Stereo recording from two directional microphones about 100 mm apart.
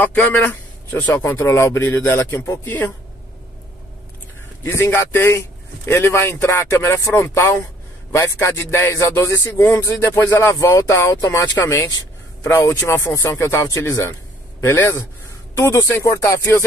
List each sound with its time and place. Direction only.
0.0 s speech: 20° left (ahead or behind)
4.6 s speech: 25° left (ahead or behind)